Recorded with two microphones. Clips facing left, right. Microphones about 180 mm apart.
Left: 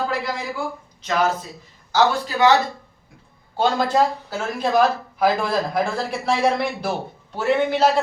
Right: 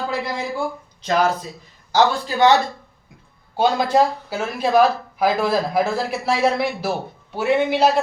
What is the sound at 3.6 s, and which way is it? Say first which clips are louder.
Speech: right 2 dB; 10° right (ahead or behind).